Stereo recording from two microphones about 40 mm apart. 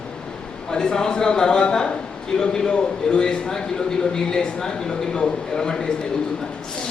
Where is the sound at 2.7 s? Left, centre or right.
Left.